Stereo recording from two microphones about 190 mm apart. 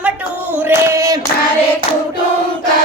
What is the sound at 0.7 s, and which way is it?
Female singing, 15° right (ahead or behind).